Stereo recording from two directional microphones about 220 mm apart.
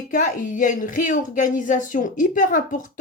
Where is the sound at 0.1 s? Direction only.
35° left (ahead or behind).